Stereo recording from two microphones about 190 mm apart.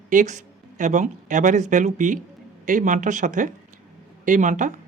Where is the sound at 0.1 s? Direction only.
40° right (ahead or behind).